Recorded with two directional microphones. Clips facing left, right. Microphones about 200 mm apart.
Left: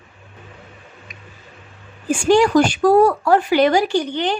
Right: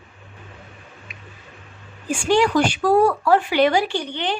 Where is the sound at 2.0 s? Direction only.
45° left (ahead or behind).